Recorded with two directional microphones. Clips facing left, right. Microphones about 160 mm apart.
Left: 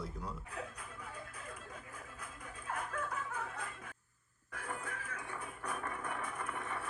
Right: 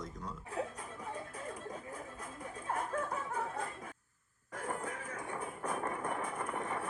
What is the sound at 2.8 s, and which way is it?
Snicker, 35° right (ahead or behind).